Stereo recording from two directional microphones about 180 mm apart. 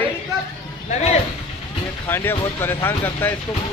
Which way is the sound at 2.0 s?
10° left (ahead or behind).